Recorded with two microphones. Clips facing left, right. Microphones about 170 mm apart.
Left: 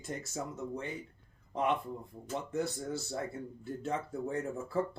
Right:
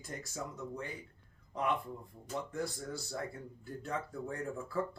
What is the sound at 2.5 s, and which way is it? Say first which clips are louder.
Speech: left 4 dB; 20° left (ahead or behind).